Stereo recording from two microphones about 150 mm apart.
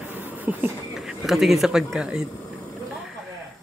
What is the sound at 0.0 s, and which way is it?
Speech, 10° right (ahead or behind).